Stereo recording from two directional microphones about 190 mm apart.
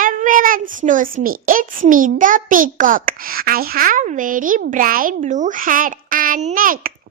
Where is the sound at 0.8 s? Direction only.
45° right (ahead or behind).